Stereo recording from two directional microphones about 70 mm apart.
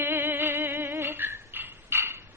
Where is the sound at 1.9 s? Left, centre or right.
Right.